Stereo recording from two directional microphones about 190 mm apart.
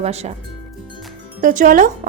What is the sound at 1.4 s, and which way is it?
Speech, 45° right (ahead or behind).